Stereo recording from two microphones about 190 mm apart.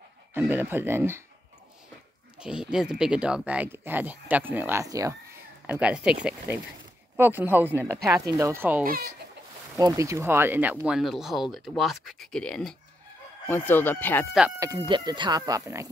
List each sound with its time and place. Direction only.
0.3 s speech: 10° right (ahead or behind)
2.3 s speech: 5° right (ahead or behind)
5.7 s speech: 5° right (ahead or behind); by 14.2 s 10° left (ahead or behind)
14.9 s speech: 25° right (ahead or behind)